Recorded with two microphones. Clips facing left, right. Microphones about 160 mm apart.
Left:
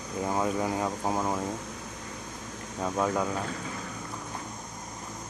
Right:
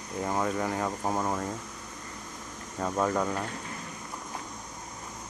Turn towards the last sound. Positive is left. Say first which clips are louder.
# even
turn(degrees=5)  # may be behind; listen again after turning